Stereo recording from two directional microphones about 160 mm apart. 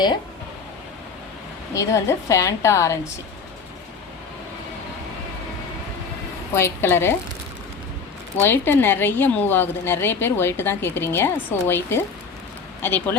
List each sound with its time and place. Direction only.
1.7 s a woman's voice: 20° left (ahead or behind)
6.5 s a woman's voice: 15° left (ahead or behind)
8.4 s a woman's voice: 15° left (ahead or behind)